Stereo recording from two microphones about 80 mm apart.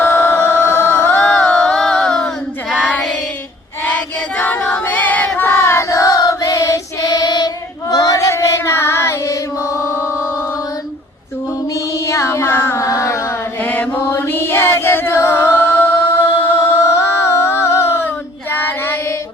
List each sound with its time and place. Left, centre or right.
0.0 s singing: left
1.0 s a sound: centre
3.8 s child singing: centre
4.8 s choir: left
11.7 s child singing: left
13.6 s mantra: left
14.1 s a capella: left
18.5 s female singing: left